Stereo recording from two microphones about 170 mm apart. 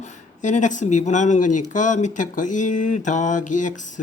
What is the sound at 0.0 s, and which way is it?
Speech, 45° left (ahead or behind).